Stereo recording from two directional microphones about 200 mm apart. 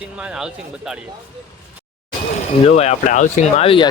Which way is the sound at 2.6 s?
30° left (ahead or behind).